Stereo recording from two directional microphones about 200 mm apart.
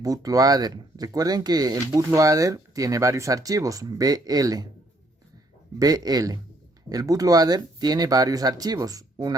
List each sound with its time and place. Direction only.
0.0 s speech: 15° right (ahead or behind)
5.8 s speech: 20° right (ahead or behind)